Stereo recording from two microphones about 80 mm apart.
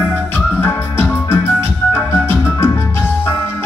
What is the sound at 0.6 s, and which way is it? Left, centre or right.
Music, left.